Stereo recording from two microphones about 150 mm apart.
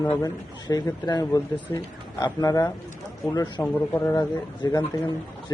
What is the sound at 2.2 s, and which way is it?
Speech, 25° left (ahead or behind).